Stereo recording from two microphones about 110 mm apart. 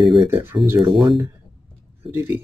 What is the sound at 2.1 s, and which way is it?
Speech, 20° right (ahead or behind).